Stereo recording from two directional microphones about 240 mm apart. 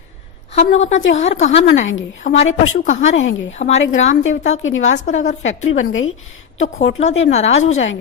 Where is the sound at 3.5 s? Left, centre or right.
Left.